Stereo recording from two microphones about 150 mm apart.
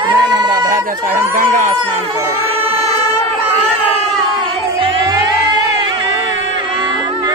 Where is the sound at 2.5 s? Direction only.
40° right (ahead or behind).